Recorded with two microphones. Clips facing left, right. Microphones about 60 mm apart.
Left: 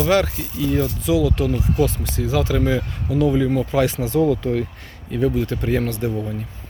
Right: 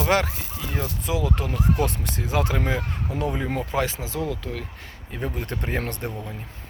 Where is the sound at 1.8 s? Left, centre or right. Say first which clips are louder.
Left 5 dB; right.